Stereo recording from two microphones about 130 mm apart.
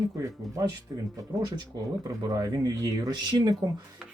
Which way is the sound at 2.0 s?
30° right (ahead or behind).